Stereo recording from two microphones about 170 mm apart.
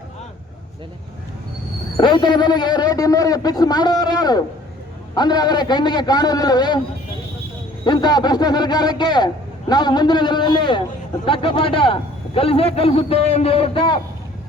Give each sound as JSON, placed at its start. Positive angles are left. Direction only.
{"t": 2.0, "sound": "a man's voice", "side_deg": 25}
{"t": 7.9, "sound": "a man's voice", "side_deg": 25}